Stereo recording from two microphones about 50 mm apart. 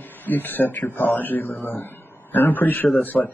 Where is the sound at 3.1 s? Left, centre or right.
Centre.